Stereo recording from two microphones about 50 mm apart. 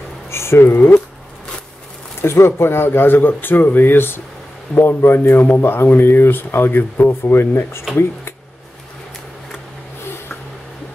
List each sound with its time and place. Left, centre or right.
0.3 s speech: left
0.7 s speech: left
2.3 s speech: left